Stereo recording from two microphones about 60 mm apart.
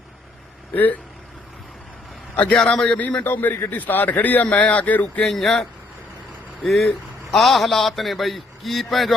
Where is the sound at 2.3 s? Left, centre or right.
Left.